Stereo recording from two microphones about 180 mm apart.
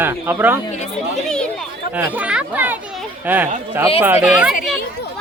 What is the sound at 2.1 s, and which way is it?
Speech, 5° right (ahead or behind).